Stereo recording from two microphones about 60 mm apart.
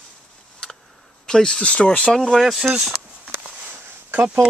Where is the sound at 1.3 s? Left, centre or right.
Centre.